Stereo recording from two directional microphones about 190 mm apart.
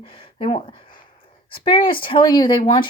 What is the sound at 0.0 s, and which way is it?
Speech, 30° left (ahead or behind).